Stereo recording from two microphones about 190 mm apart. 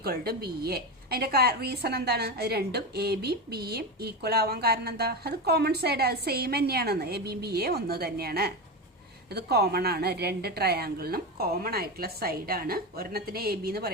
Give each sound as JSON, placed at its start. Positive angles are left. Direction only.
{"t": 0.0, "sound": "a woman's voice", "side_deg": -55}